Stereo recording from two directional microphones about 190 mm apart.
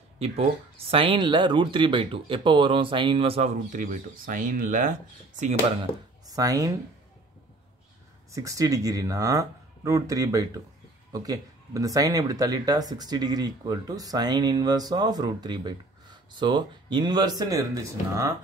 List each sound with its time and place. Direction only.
0.2 s speech: 30° right (ahead or behind)
6.2 s speech: 20° right (ahead or behind)
8.3 s speech: 15° right (ahead or behind)